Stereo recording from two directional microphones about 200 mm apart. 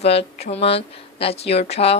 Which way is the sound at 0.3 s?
30° left (ahead or behind).